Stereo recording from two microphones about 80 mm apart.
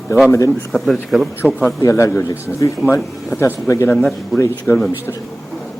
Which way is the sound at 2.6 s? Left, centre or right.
Left.